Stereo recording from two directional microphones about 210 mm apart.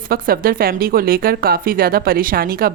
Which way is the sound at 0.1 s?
45° right (ahead or behind).